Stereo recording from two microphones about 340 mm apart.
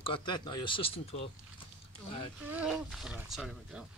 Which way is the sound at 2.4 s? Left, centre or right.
Centre.